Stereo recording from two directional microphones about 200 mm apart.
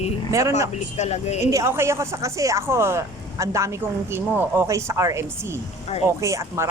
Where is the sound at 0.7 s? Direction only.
35° left (ahead or behind).